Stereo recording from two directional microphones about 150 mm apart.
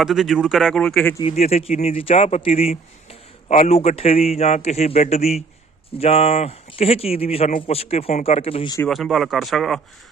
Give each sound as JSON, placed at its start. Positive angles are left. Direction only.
{"t": 0.0, "sound": "a man's voice", "side_deg": 0}
{"t": 1.2, "sound": "a man's voice", "side_deg": 45}
{"t": 8.9, "sound": "a man's voice", "side_deg": 0}